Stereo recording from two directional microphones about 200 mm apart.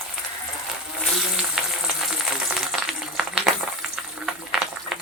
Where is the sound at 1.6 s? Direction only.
5° right (ahead or behind).